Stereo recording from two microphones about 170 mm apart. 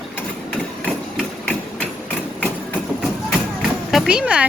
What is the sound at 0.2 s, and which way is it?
Hammer, 10° left (ahead or behind).